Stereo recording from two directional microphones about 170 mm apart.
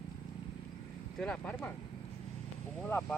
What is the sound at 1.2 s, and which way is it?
Speech, 5° left (ahead or behind).